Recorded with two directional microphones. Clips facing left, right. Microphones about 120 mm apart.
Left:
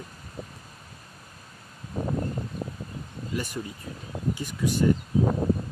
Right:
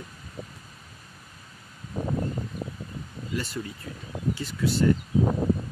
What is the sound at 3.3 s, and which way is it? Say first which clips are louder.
Speech: even; 15° left (ahead or behind).